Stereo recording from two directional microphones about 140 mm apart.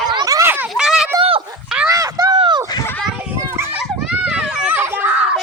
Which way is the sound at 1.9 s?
25° right (ahead or behind).